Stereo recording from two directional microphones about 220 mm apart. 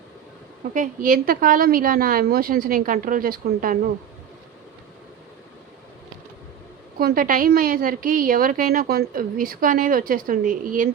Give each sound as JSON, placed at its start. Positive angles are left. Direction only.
{"t": 0.7, "sound": "a woman's voice", "side_deg": -35}
{"t": 7.0, "sound": "a woman's voice", "side_deg": -40}